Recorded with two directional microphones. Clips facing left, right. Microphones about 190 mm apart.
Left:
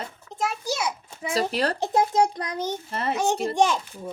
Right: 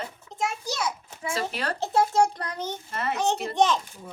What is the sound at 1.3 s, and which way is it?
Speech, 35° left (ahead or behind).